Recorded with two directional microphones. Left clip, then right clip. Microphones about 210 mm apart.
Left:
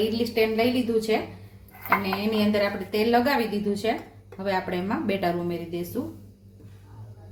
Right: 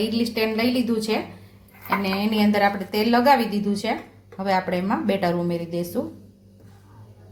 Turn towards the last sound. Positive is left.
turn(degrees=-35)  # may be behind; listen again after turning